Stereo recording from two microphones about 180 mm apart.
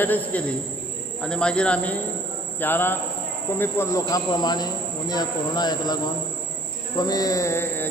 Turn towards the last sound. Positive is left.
turn(degrees=15)  # may be behind; listen again after turning